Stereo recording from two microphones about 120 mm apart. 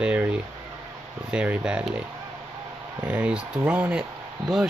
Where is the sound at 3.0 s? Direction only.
10° right (ahead or behind).